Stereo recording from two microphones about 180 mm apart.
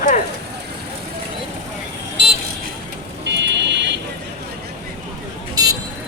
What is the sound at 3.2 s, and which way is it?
Buzzer, 75° right (ahead or behind).